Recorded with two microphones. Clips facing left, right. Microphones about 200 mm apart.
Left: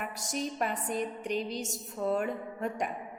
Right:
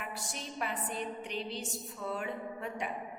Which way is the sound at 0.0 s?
40° left (ahead or behind).